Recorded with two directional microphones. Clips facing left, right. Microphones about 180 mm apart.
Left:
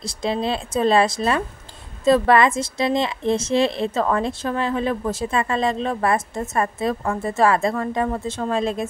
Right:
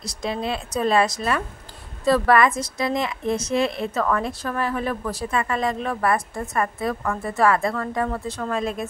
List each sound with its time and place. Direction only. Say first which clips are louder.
0.0 s a woman's voice: left 4 dB; 30° left (ahead or behind)